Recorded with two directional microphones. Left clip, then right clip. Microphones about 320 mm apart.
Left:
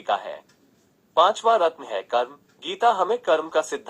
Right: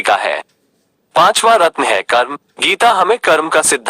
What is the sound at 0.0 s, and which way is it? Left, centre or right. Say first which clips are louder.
Speech: right 13 dB; right.